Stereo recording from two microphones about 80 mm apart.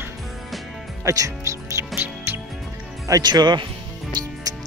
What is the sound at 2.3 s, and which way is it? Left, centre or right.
Music, right.